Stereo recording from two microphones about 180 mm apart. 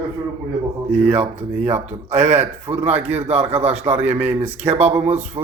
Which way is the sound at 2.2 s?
35° right (ahead or behind).